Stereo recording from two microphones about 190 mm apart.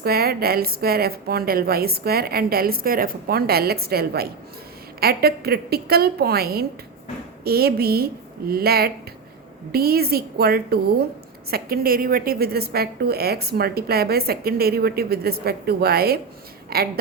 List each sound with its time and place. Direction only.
0.0 s a woman's voice: 55° right (ahead or behind)